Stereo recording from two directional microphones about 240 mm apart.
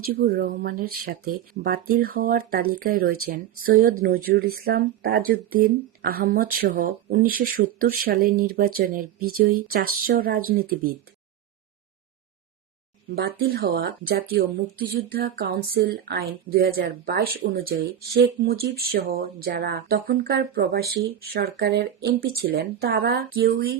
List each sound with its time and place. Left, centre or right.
0.0 s speech: right
13.1 s speech: right